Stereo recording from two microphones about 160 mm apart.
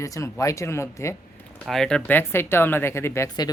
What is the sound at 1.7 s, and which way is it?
Speech, 5° left (ahead or behind).